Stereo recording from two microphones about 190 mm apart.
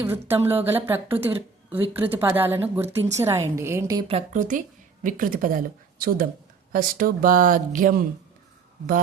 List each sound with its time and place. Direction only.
0.0 s a woman's voice: 10° right (ahead or behind)
4.1 s speech: 40° right (ahead or behind)